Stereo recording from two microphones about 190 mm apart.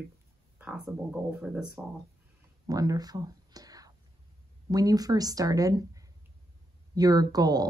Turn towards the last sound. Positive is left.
turn(degrees=-20)  # may be behind; listen again after turning